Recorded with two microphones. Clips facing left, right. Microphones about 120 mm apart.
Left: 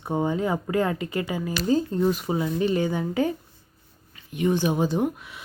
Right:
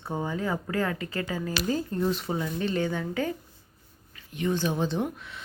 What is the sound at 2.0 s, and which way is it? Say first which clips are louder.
Speech: left 4 dB; 10° left (ahead or behind).